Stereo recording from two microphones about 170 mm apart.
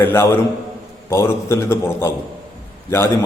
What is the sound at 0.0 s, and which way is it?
A man's voice, 15° left (ahead or behind).